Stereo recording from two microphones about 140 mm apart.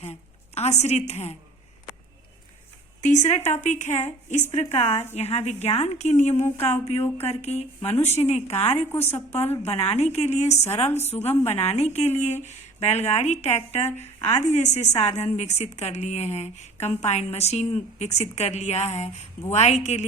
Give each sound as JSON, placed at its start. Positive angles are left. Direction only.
{"t": 0.5, "sound": "speech", "side_deg": 50}
{"t": 3.0, "sound": "a woman's voice", "side_deg": 60}
{"t": 8.9, "sound": "a woman's voice", "side_deg": 15}
{"t": 9.1, "sound": "speech", "side_deg": 50}
{"t": 10.8, "sound": "a woman's voice", "side_deg": 15}
{"t": 11.4, "sound": "speech", "side_deg": 50}